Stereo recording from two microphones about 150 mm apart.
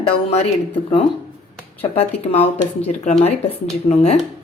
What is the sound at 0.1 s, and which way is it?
Speech, 40° left (ahead or behind).